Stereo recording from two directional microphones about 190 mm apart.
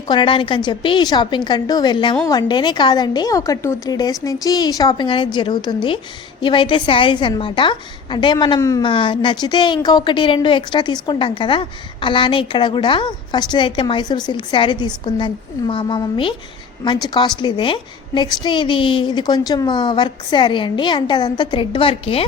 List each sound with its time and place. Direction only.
0.1 s a woman's voice: 25° left (ahead or behind)